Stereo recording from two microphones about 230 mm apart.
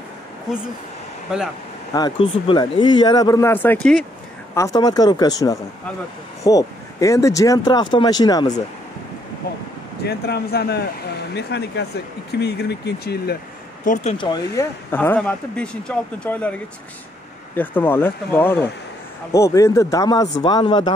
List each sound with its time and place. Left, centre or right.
2.0 s speech: left
10.0 s speech: left
14.1 s speech: centre